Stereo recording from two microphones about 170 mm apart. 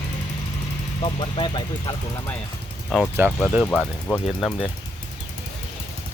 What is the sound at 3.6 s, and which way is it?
Speech, 10° left (ahead or behind).